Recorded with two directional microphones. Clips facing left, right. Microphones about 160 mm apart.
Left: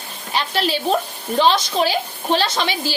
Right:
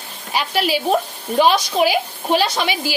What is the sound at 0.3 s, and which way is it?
A woman's voice, 10° right (ahead or behind).